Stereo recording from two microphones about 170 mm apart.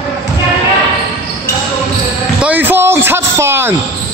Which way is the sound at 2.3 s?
10° right (ahead or behind).